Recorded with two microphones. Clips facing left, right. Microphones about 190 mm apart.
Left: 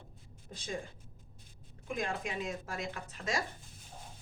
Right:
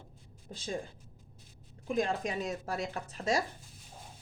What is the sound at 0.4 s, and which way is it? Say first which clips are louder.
Speech: right 3 dB; 30° right (ahead or behind).